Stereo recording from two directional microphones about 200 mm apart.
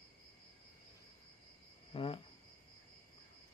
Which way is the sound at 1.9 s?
25° left (ahead or behind).